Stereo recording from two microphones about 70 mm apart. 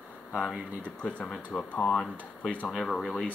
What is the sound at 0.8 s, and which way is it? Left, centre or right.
Speech, centre.